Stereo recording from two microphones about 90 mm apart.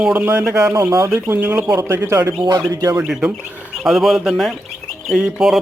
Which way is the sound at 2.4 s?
50° right (ahead or behind).